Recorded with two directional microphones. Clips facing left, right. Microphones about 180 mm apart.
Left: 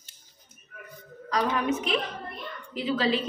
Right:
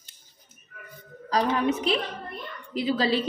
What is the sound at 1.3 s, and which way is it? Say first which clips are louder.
A woman's voice: right 2 dB; 35° right (ahead or behind).